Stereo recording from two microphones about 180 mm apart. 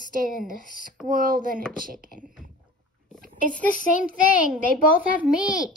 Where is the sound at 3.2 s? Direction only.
50° right (ahead or behind).